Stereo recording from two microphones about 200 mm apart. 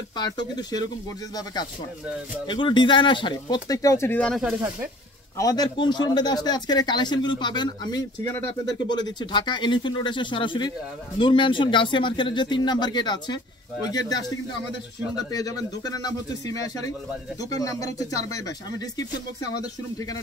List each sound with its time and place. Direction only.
0.1 s speech: 20° left (ahead or behind); by 4.6 s centre (ahead or behind)
5.4 s speech: 20° left (ahead or behind)
15.1 s speech: 20° left (ahead or behind)